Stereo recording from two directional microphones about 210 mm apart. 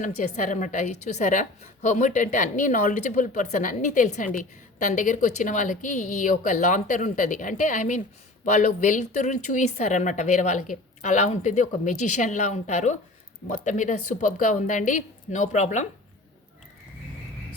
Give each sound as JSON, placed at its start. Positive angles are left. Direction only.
{"t": 0.0, "sound": "speech", "side_deg": 35}